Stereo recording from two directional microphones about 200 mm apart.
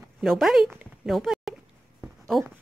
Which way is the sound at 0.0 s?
Centre (ahead or behind).